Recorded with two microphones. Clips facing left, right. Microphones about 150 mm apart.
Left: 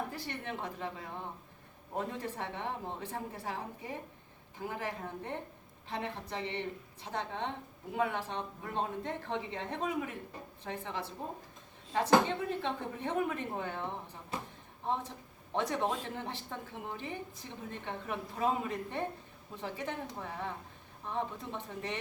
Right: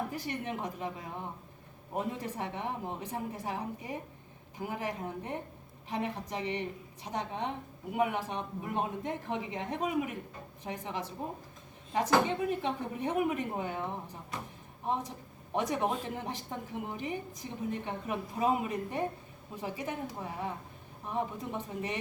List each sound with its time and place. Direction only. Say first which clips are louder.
0.1 s a woman's voice: right 4 dB; 15° right (ahead or behind)